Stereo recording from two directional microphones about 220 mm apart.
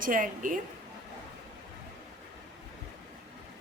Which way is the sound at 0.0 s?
40° right (ahead or behind).